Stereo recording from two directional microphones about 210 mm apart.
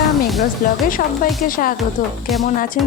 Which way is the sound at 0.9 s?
40° left (ahead or behind).